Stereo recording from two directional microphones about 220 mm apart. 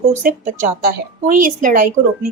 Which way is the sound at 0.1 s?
35° right (ahead or behind).